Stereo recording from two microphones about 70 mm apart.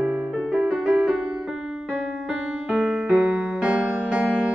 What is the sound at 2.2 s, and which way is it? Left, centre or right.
Keyboard, centre.